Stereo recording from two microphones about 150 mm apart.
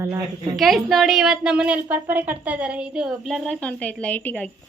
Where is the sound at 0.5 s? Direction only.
Centre (ahead or behind).